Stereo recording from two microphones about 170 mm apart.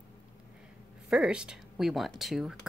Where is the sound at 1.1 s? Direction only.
5° right (ahead or behind).